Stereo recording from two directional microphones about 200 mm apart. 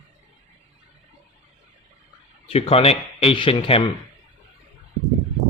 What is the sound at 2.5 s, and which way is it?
Speech, 30° left (ahead or behind).